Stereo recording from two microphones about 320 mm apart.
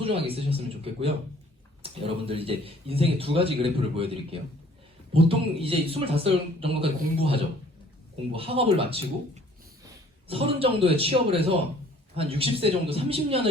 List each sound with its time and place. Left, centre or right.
0.0 s speech: centre
1.8 s speech: centre